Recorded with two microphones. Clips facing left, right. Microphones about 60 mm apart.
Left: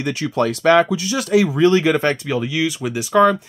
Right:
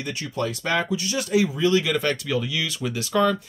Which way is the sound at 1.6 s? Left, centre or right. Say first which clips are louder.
Left 7 dB; left.